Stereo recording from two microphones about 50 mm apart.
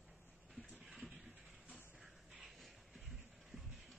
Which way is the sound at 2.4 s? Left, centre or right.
Centre.